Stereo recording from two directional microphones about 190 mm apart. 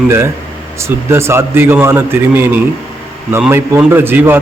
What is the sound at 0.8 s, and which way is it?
A man's voice, 15° right (ahead or behind).